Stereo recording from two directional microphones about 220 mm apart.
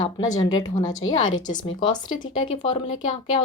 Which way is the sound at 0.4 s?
20° left (ahead or behind).